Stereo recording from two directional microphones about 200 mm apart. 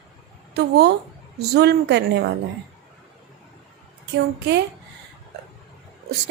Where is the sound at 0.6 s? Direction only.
55° right (ahead or behind).